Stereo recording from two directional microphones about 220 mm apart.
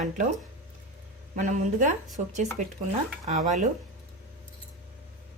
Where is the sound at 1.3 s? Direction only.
35° right (ahead or behind).